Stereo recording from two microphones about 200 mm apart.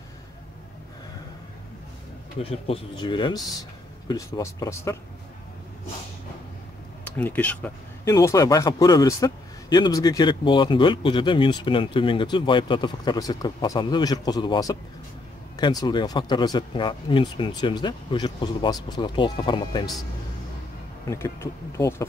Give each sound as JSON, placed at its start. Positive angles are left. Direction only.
{"t": 2.4, "sound": "speech", "side_deg": 30}
{"t": 7.1, "sound": "speech", "side_deg": 10}
{"t": 21.1, "sound": "speech", "side_deg": 15}